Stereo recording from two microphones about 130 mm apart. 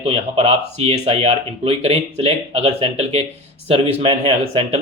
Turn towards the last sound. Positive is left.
turn(degrees=-55)  # may be behind; listen again after turning